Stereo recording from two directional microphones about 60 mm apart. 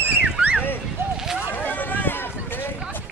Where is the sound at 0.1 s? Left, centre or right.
Right.